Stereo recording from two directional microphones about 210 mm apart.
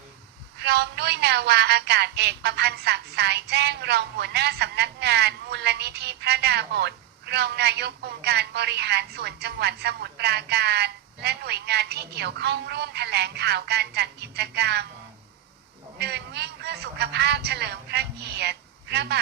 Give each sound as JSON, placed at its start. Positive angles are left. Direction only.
{"t": 0.6, "sound": "speech", "side_deg": -50}
{"t": 16.0, "sound": "speech", "side_deg": -50}